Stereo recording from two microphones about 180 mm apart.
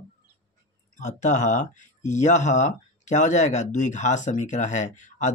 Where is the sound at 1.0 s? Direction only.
45° left (ahead or behind).